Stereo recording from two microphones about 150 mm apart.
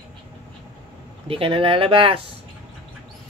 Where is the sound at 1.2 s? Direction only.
40° right (ahead or behind).